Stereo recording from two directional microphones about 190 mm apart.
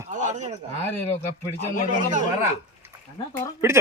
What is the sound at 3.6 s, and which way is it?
Speech, 15° right (ahead or behind).